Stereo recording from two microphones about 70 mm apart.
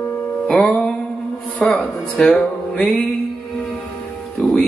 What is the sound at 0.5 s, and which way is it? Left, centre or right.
Music, centre.